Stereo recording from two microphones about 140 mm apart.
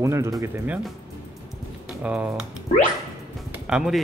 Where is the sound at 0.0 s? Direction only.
20° right (ahead or behind).